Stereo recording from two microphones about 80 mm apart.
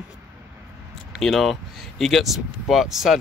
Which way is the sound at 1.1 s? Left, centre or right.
Centre.